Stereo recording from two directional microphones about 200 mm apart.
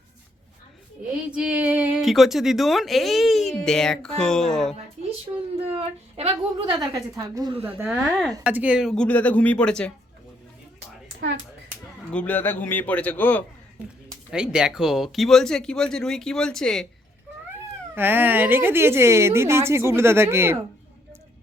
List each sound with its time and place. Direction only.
1.3 s a woman's voice: 5° right (ahead or behind)
6.1 s a woman's voice: 30° right (ahead or behind)
7.7 s a woman's voice: 5° right (ahead or behind)
12.1 s a man's voice: 10° left (ahead or behind)
14.3 s a woman's voice: 5° right (ahead or behind)
17.9 s a woman's voice: 10° right (ahead or behind)